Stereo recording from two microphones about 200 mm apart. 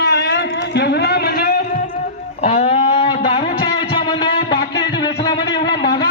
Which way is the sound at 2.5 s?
35° left (ahead or behind).